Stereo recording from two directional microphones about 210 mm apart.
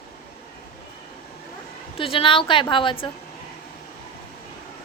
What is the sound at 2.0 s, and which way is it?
A woman's voice, 25° left (ahead or behind).